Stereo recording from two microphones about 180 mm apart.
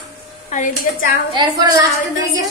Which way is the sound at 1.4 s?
20° right (ahead or behind).